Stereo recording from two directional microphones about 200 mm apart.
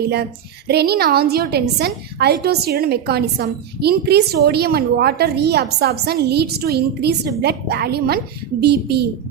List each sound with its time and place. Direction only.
0.7 s a woman's voice: 55° right (ahead or behind)